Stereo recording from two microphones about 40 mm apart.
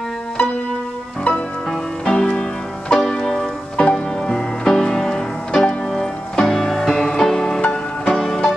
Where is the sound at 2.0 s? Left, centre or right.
Left.